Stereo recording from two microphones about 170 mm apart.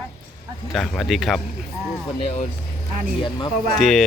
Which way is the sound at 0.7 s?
Centre (ahead or behind).